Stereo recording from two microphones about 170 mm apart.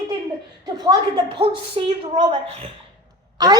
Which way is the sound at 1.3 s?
35° right (ahead or behind).